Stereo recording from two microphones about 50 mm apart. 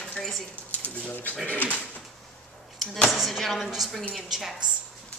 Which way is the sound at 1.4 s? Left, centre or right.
Left.